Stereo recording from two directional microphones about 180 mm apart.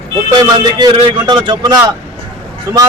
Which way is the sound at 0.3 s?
25° right (ahead or behind).